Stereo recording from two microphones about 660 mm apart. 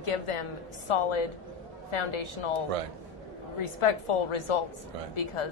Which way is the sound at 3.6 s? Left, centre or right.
Left.